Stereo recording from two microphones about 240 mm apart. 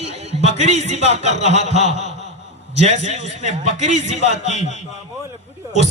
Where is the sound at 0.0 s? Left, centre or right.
Right.